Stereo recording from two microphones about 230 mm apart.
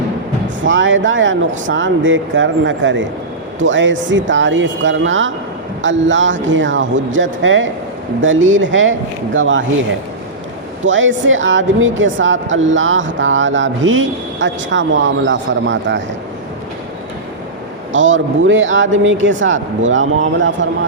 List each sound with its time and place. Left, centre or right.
0.6 s speech: right
10.8 s speech: right
17.9 s speech: right